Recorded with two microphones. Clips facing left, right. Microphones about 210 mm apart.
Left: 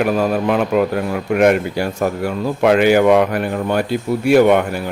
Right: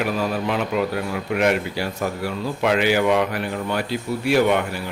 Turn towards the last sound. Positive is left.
turn(degrees=50)  # may be behind; listen again after turning